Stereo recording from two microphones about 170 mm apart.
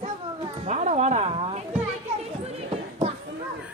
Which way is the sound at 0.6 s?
40° right (ahead or behind).